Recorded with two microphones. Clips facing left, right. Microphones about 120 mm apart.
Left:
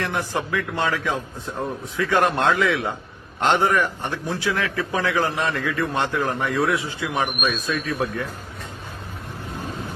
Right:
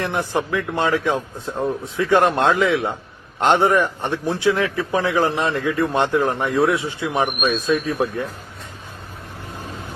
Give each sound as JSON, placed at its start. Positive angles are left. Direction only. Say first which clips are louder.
{"t": 0.0, "sound": "a man's voice", "louder": "right 3 dB", "side_deg": -20}